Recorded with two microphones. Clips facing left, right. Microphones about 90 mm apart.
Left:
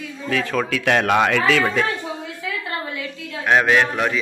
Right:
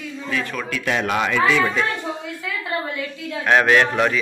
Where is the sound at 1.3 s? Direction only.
80° left.